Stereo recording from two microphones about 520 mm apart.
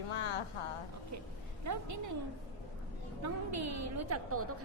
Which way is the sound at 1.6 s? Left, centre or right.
Right.